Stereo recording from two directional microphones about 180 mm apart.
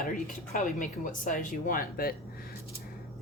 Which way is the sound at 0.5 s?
45° left (ahead or behind).